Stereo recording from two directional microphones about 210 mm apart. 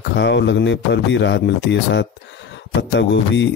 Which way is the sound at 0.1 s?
55° left (ahead or behind).